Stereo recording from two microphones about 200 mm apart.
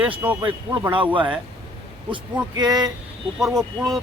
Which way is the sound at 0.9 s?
25° right (ahead or behind).